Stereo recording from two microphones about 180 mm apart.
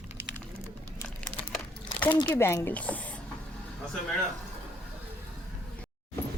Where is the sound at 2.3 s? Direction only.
15° left (ahead or behind).